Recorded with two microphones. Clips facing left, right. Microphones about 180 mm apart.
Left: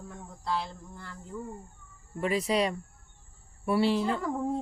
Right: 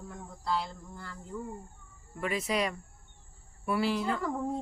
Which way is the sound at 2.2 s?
35° left (ahead or behind).